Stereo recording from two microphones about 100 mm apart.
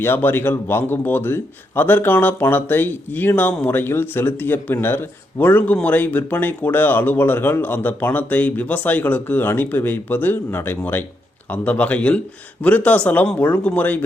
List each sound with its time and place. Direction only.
0.0 s a man's voice: 20° left (ahead or behind)